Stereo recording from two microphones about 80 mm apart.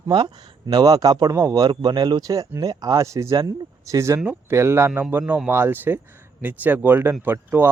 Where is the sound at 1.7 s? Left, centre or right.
Right.